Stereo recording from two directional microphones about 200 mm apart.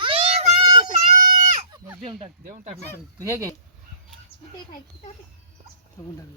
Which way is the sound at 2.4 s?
35° right (ahead or behind).